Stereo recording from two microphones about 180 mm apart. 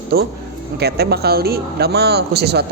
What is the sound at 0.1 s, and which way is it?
Speech, 55° right (ahead or behind).